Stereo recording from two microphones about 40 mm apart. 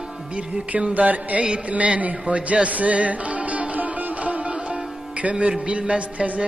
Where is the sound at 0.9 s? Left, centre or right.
Right.